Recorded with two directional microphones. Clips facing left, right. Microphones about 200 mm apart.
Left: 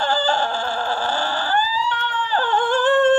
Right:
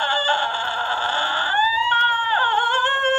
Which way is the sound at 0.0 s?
40° left (ahead or behind).